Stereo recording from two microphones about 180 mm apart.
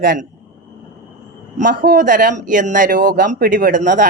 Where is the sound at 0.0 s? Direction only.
50° right (ahead or behind).